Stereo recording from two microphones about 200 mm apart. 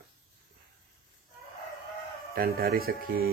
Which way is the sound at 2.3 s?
50° right (ahead or behind).